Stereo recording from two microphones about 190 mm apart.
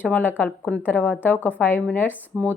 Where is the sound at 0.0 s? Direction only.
10° left (ahead or behind).